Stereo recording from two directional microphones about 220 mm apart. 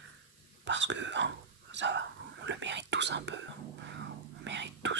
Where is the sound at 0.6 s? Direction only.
55° right (ahead or behind).